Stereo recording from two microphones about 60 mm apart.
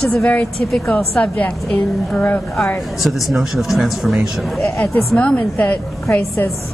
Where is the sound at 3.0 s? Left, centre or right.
Centre.